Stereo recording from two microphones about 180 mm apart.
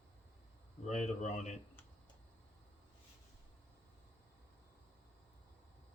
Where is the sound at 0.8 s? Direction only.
40° left (ahead or behind).